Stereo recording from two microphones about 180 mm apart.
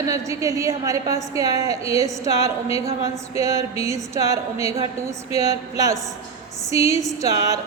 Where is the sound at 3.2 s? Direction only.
15° right (ahead or behind).